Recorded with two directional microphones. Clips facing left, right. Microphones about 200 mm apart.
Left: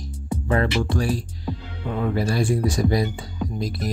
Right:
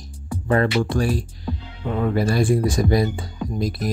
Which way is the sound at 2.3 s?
55° right (ahead or behind).